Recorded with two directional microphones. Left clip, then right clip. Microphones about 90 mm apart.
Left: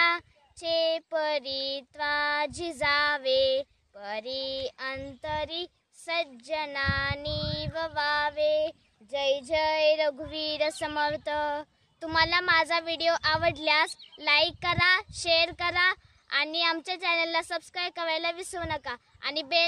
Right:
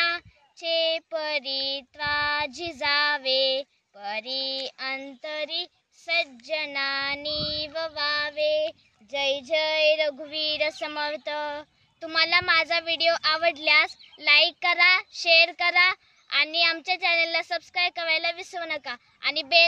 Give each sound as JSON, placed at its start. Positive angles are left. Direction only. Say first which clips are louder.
{"t": 0.7, "sound": "child singing", "louder": "right 2 dB", "side_deg": 50}